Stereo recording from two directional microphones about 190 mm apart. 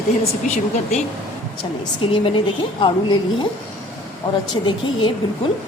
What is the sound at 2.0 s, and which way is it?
A woman's voice, 25° left (ahead or behind).